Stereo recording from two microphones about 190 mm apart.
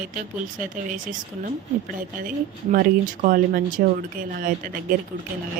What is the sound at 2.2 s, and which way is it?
Speech, 45° right (ahead or behind).